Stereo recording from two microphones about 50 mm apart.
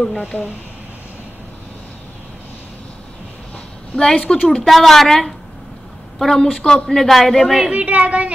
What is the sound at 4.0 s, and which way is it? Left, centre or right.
Speech, centre.